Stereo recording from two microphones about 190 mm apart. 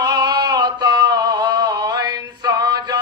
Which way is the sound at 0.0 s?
20° right (ahead or behind).